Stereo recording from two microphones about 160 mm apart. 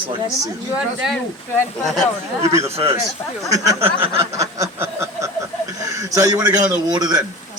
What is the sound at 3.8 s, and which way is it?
Speech, 35° right (ahead or behind).